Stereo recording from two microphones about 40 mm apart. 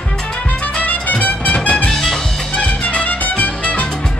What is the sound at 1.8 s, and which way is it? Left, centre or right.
Music, centre.